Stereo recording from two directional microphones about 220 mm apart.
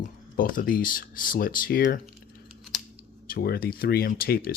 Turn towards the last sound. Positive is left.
turn(degrees=45)  # may be behind; listen again after turning